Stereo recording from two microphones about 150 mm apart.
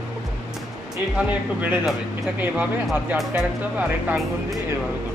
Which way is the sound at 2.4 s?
10° right (ahead or behind).